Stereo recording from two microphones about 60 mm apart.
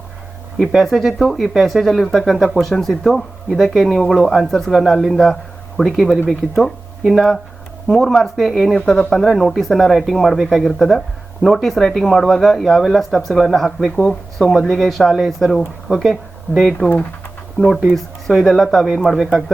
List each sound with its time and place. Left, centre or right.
0.6 s speech: centre
16.8 s speech: left
17.9 s speech: centre